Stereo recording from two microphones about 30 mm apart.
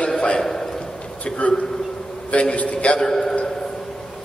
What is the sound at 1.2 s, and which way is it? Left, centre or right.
A man's voice, left.